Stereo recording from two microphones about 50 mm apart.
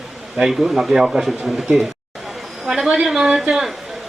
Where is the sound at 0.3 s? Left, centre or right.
Centre.